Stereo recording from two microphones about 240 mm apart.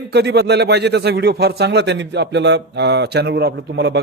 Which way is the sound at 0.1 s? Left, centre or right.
Right.